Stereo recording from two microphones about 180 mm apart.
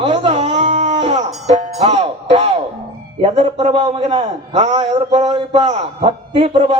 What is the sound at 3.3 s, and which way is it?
A man's voice, 30° right (ahead or behind).